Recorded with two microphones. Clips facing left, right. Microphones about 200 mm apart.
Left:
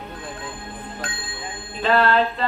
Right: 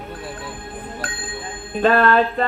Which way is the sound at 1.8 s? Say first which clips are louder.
Right 3 dB; 50° right (ahead or behind).